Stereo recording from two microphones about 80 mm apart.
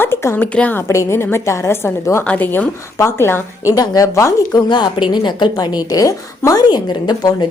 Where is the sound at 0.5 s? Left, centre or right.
Centre.